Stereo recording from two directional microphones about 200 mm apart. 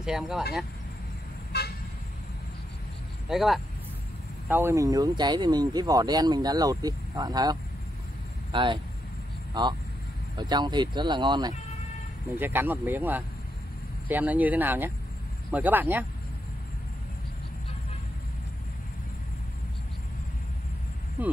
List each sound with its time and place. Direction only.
0.0 s speech: 5° right (ahead or behind)
1.5 s toot: 55° left (ahead or behind)
3.3 s speech: centre (ahead or behind)
4.5 s speech: 10° right (ahead or behind)
12.4 s speech: 10° right (ahead or behind)